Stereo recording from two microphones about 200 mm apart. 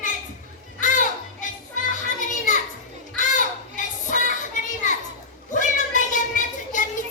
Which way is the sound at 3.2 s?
40° left (ahead or behind).